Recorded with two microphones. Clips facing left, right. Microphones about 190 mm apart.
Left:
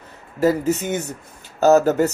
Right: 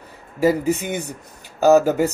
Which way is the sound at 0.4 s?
10° right (ahead or behind).